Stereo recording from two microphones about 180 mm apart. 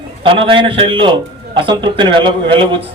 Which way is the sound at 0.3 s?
30° right (ahead or behind).